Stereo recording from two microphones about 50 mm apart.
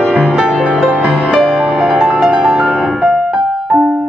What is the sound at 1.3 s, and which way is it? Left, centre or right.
Music, centre.